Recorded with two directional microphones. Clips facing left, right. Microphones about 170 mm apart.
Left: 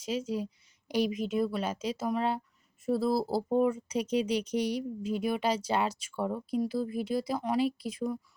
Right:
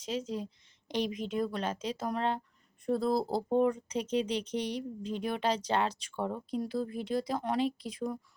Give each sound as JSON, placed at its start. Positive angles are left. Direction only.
{"t": 0.0, "sound": "speech", "side_deg": 10}